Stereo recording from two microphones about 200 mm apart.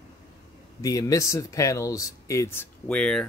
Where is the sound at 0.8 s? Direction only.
15° left (ahead or behind).